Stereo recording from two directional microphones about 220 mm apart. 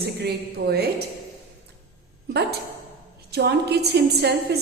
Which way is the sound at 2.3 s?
45° right (ahead or behind).